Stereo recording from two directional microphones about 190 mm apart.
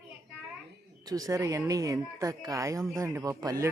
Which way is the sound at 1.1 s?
20° right (ahead or behind).